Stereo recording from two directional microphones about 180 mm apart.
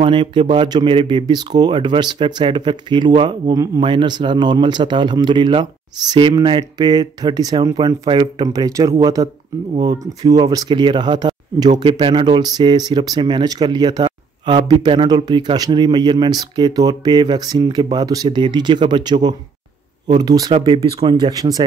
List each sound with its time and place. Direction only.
0.0 s speech: 30° right (ahead or behind)